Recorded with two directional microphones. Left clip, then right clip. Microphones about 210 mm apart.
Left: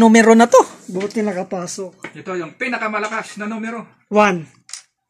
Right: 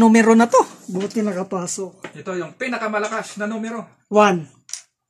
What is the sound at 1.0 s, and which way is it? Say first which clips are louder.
Speech: left 2 dB; 30° right (ahead or behind).